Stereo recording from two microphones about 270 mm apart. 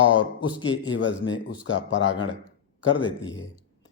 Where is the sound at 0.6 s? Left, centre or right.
Left.